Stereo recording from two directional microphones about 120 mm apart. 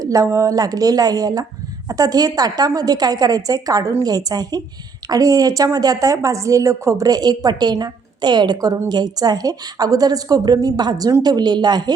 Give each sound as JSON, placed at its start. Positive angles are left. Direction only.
{"t": 0.0, "sound": "a woman's voice", "side_deg": -25}